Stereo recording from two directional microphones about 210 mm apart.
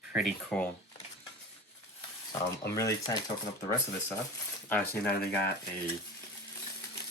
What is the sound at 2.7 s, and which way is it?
Speech, 15° left (ahead or behind).